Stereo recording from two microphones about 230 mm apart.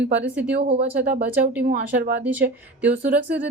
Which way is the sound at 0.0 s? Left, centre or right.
Right.